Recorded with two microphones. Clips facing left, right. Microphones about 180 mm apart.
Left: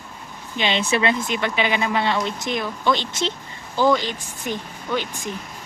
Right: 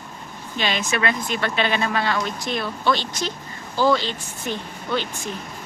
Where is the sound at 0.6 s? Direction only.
25° left (ahead or behind).